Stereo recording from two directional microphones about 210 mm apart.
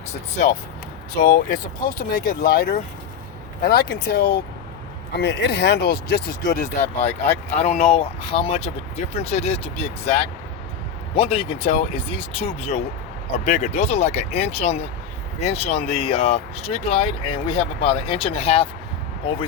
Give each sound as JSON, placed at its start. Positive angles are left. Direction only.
{"t": 1.2, "sound": "speech", "side_deg": 45}